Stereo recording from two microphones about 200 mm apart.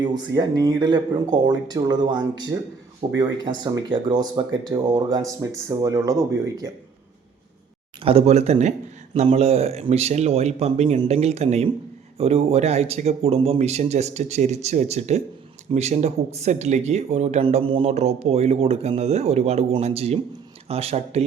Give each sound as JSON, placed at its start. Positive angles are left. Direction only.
{"t": 0.0, "sound": "speech", "side_deg": -20}
{"t": 8.0, "sound": "speech", "side_deg": -30}